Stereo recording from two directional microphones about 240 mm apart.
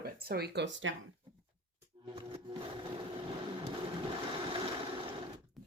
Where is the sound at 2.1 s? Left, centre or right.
Right.